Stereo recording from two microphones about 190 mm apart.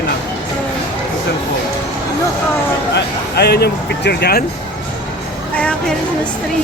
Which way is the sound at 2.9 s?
60° left (ahead or behind).